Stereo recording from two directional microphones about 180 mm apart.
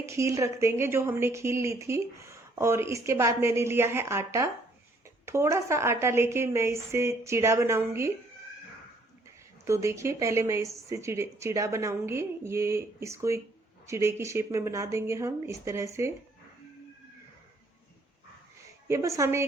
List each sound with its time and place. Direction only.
0.0 s a woman's voice: 15° right (ahead or behind)
9.6 s a woman's voice: 15° right (ahead or behind)
18.9 s a woman's voice: 15° right (ahead or behind)